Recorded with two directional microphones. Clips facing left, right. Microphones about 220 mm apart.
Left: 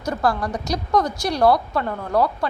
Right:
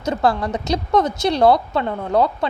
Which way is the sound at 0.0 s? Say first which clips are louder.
Right 3 dB; 25° right (ahead or behind).